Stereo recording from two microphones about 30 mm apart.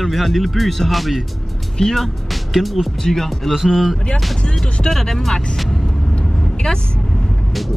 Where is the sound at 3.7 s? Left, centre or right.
Centre.